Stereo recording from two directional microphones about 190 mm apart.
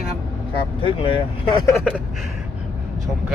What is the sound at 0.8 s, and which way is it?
Speech, 25° left (ahead or behind).